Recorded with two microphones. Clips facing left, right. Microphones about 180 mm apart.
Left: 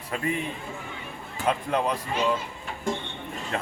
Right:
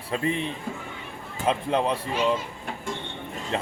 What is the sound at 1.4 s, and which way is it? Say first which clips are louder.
Speech: right 1 dB; 25° right (ahead or behind).